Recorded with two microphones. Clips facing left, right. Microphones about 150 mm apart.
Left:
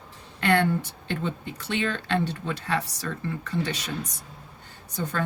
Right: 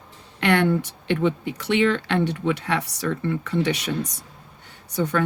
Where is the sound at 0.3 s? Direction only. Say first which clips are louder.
Right 3 dB; 75° right (ahead or behind).